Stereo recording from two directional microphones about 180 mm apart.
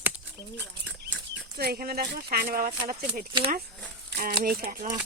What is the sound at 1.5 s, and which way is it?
Speech, 60° right (ahead or behind).